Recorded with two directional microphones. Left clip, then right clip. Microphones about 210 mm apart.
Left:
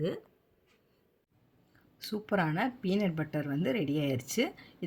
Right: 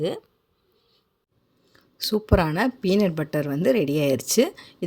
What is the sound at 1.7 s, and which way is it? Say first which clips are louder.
Speech: right 14 dB; 40° right (ahead or behind).